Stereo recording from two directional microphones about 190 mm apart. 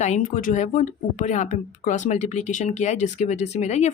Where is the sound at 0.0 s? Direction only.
35° left (ahead or behind).